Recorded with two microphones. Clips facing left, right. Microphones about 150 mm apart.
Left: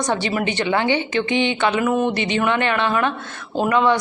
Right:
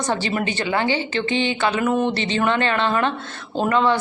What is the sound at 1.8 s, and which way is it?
A woman's voice, 5° left (ahead or behind).